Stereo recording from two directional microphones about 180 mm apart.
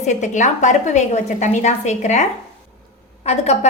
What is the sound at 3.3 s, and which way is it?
Speech, 35° left (ahead or behind).